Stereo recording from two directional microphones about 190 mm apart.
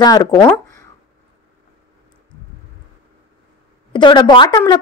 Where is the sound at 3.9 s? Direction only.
25° left (ahead or behind).